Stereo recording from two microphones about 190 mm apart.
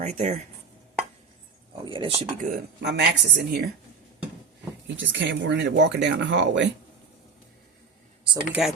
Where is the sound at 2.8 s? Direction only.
65° right (ahead or behind).